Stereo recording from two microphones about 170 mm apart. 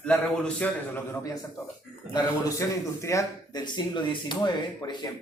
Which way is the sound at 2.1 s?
15° left (ahead or behind).